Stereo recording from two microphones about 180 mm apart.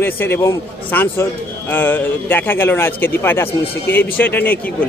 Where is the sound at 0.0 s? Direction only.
15° left (ahead or behind).